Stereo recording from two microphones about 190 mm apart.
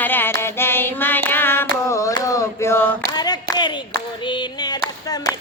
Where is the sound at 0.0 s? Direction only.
10° left (ahead or behind).